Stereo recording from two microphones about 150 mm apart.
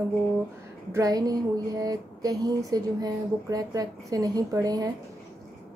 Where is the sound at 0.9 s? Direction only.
25° right (ahead or behind).